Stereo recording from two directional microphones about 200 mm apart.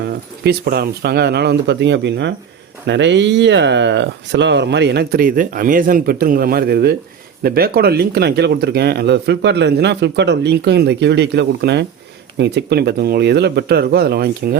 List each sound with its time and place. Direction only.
0.0 s speech: 55° right (ahead or behind)